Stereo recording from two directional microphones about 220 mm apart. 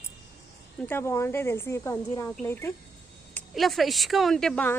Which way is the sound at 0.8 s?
10° left (ahead or behind).